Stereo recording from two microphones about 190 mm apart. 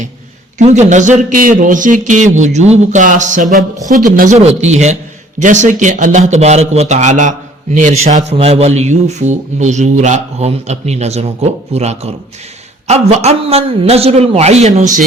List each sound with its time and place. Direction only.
0.6 s speech: 40° right (ahead or behind)